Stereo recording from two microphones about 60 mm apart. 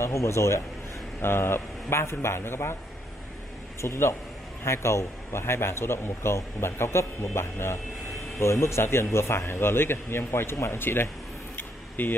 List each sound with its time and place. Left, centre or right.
0.0 s a man's voice: left
1.2 s a man's voice: left
3.8 s a man's voice: left
11.5 s a sound: left